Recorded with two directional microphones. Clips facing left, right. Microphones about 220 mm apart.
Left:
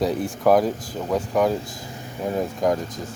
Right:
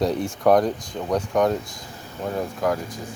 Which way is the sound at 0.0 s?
Centre (ahead or behind).